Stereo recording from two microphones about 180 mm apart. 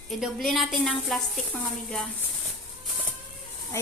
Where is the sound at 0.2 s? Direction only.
Centre (ahead or behind).